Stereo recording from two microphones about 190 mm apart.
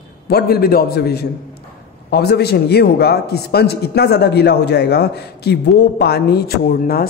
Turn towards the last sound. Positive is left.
turn(degrees=50)  # may be behind; listen again after turning